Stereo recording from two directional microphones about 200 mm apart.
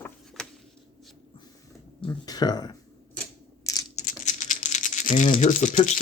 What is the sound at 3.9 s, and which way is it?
Rattle, 35° left (ahead or behind).